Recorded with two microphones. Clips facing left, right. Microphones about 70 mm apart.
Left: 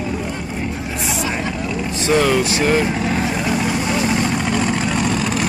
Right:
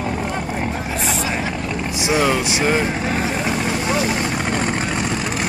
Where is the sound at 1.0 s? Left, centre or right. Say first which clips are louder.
Left 1 dB; centre.